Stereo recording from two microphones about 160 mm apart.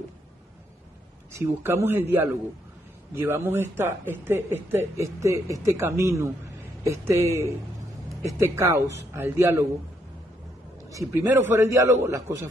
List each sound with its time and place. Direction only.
1.3 s speech: 15° right (ahead or behind)
10.9 s a man's voice: 20° right (ahead or behind)